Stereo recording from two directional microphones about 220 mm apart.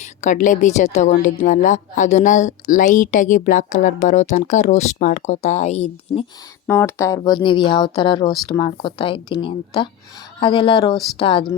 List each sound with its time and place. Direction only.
0.0 s a woman's voice: 35° left (ahead or behind)
6.7 s speech: 10° left (ahead or behind)
10.9 s speech: centre (ahead or behind)
11.2 s speech: 25° left (ahead or behind)